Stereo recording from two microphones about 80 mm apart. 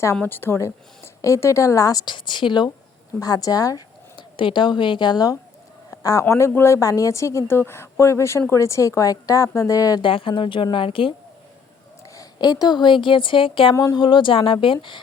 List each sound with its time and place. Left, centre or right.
0.2 s speech: left
2.0 s a woman's voice: left
3.2 s speech: left
4.2 s a woman's voice: left
5.9 s a sound: left
6.2 s speech: left
6.7 s speech: left
10.0 s speech: left
12.1 s speech: left